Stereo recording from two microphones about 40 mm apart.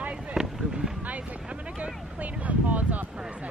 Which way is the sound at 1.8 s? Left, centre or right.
Right.